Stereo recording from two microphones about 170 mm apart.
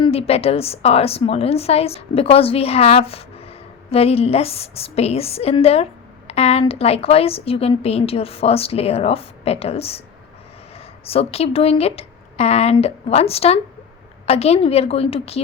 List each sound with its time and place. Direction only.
0.0 s a woman's voice: 35° left (ahead or behind)